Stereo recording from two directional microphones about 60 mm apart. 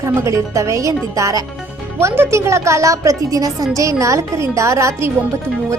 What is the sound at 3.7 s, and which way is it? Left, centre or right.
Speech, right.